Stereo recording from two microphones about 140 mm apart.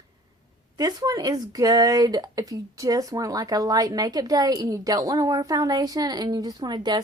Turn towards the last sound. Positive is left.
turn(degrees=-30)  # may be behind; listen again after turning